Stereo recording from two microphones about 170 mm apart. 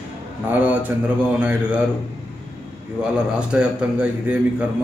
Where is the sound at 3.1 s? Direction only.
5° right (ahead or behind).